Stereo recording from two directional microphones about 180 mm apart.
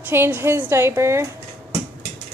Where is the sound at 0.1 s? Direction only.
15° right (ahead or behind).